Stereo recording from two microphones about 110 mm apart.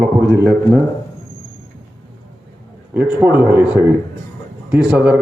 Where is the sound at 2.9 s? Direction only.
20° right (ahead or behind).